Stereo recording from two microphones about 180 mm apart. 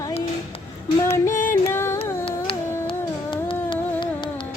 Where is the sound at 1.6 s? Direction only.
15° left (ahead or behind).